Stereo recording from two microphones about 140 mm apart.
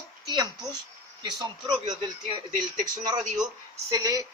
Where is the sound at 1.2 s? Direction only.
30° right (ahead or behind).